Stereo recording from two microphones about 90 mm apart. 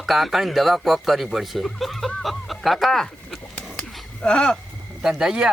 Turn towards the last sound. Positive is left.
turn(degrees=-5)  # may be behind; listen again after turning